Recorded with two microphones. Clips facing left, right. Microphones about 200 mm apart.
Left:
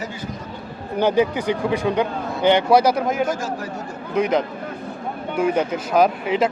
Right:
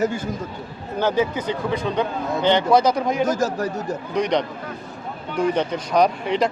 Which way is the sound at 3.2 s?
40° right (ahead or behind).